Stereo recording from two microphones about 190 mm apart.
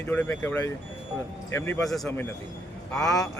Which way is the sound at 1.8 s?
Centre (ahead or behind).